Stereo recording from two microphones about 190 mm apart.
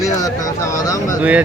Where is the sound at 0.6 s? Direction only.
15° left (ahead or behind).